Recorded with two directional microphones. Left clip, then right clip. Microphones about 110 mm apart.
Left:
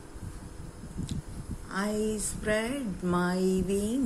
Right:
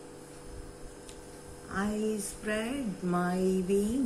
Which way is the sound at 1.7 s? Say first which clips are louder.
Left 2 dB; 40° left (ahead or behind).